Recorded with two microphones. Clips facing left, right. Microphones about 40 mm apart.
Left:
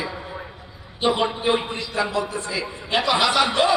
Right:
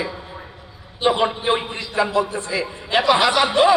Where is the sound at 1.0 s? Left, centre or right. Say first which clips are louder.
Right 2 dB; right.